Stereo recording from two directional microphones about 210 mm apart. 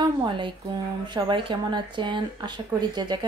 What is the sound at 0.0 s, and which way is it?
A woman's voice, 20° right (ahead or behind).